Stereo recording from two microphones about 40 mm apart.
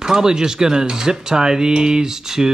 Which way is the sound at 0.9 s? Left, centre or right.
Centre.